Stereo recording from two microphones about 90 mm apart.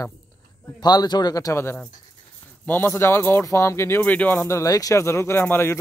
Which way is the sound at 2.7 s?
25° left (ahead or behind).